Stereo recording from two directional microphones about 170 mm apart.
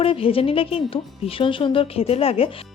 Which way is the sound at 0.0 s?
35° left (ahead or behind).